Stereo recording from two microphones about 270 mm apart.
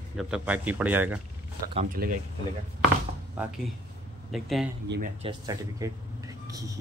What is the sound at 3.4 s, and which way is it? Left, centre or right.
Speech, centre.